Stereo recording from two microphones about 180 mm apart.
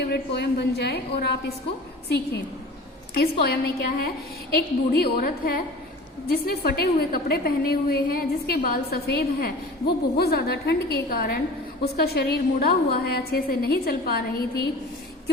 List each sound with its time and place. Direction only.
0.0 s a woman's voice: 65° left (ahead or behind)